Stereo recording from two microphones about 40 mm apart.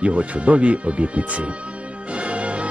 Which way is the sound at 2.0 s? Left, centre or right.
Right.